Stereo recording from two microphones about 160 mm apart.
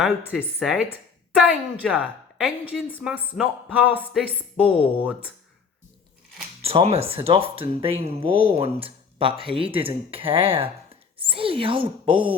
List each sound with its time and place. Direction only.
0.3 s a woman's voice: 5° right (ahead or behind)
6.6 s speech: 40° right (ahead or behind)